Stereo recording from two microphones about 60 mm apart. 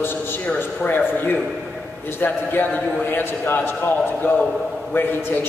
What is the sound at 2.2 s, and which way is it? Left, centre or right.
A man's voice, left.